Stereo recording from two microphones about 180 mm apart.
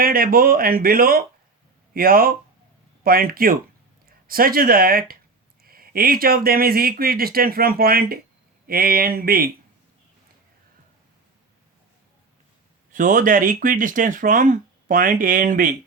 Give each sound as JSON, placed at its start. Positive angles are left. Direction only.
{"t": 0.0, "sound": "speech", "side_deg": -55}
{"t": 12.9, "sound": "speech", "side_deg": -45}